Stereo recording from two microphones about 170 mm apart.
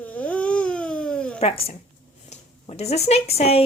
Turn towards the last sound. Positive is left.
turn(degrees=35)  # may be behind; listen again after turning